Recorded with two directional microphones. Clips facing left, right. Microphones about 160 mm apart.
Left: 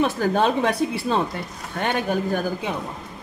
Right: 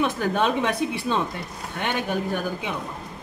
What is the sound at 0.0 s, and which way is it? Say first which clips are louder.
A woman's voice: left 3 dB; 35° left (ahead or behind).